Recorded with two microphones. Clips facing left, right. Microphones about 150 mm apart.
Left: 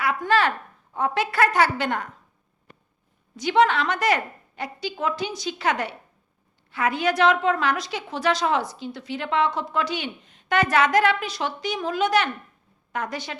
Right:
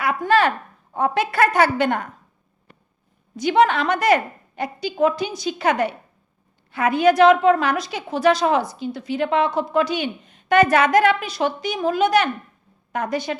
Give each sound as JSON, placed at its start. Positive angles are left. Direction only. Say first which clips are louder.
{"t": 0.0, "sound": "a woman's voice", "louder": "right 3 dB", "side_deg": -50}
{"t": 3.3, "sound": "a woman's voice", "louder": "right 3 dB", "side_deg": -55}